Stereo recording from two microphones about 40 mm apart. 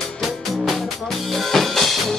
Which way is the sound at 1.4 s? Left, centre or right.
Centre.